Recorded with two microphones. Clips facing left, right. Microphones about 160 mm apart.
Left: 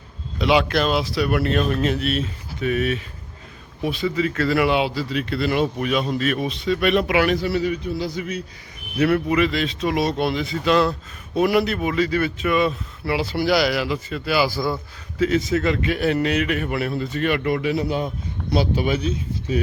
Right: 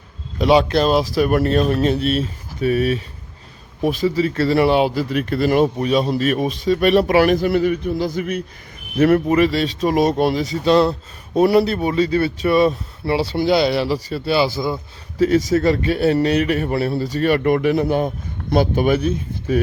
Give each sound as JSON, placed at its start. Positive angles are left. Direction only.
{"t": 0.3, "sound": "speech", "side_deg": -40}
{"t": 9.0, "sound": "speech", "side_deg": -45}
{"t": 15.2, "sound": "speech", "side_deg": -40}